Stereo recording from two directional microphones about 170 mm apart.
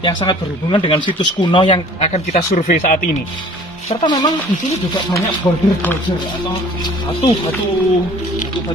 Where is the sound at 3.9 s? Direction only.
30° left (ahead or behind).